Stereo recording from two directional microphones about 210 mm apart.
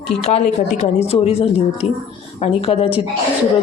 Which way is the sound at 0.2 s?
30° left (ahead or behind).